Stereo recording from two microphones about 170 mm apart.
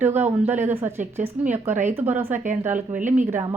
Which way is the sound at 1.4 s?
10° right (ahead or behind).